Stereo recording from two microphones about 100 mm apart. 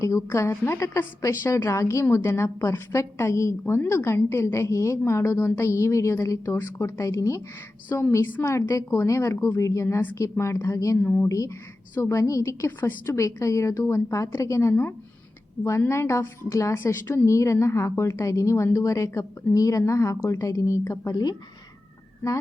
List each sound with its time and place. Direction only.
0.0 s a woman's voice: 30° left (ahead or behind)
7.9 s a woman's voice: 20° left (ahead or behind)
11.0 s speech: 15° left (ahead or behind)
11.3 s a woman's voice: 35° left (ahead or behind)